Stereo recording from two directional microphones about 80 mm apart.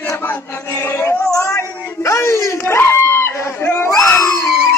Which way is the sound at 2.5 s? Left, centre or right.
Left.